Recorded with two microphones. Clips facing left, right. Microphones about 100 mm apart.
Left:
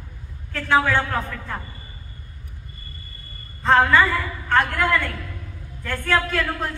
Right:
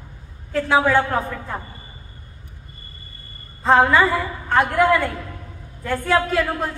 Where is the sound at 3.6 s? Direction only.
15° right (ahead or behind).